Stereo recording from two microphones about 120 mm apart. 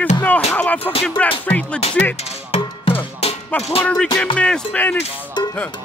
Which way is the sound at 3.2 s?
55° left (ahead or behind).